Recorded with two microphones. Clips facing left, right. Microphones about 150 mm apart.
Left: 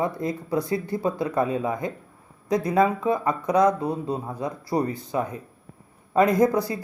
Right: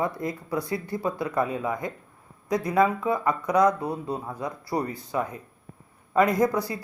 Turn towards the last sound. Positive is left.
turn(degrees=25)  # may be behind; listen again after turning